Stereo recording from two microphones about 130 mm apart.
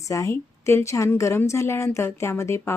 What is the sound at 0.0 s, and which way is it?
Speech, 25° left (ahead or behind).